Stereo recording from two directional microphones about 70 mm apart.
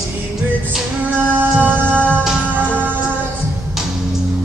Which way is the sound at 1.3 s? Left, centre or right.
Right.